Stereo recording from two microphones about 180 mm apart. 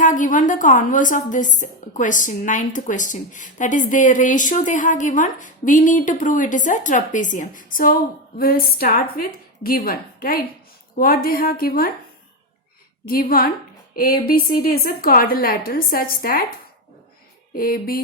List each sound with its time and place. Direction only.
0.0 s a woman's voice: 45° left (ahead or behind)
13.1 s a woman's voice: 55° left (ahead or behind)
17.5 s a woman's voice: 55° left (ahead or behind)